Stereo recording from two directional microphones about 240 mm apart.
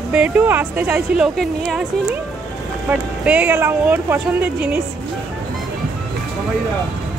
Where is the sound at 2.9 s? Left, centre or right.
Centre.